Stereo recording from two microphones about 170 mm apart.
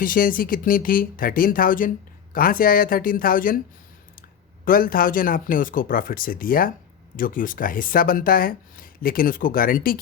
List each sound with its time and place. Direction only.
0.0 s speech: 55° left (ahead or behind)
4.6 s speech: 55° left (ahead or behind)